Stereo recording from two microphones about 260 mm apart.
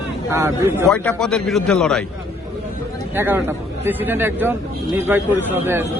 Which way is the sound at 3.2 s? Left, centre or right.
Centre.